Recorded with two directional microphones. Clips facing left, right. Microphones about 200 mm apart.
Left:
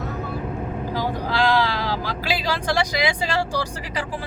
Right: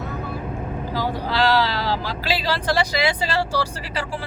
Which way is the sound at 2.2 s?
15° left (ahead or behind).